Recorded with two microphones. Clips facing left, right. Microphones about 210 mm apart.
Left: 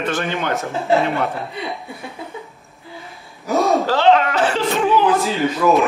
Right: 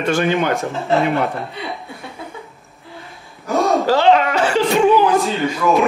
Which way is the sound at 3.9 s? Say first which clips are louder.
Right 1 dB; 10° right (ahead or behind).